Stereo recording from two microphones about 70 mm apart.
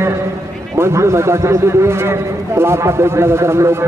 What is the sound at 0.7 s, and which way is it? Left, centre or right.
A man's voice, right.